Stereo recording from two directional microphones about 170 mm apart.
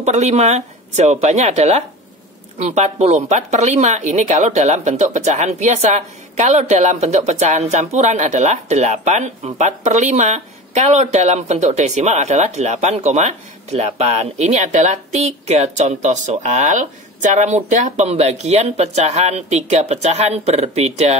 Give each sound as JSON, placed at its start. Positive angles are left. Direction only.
{"t": 0.0, "sound": "speech", "side_deg": -40}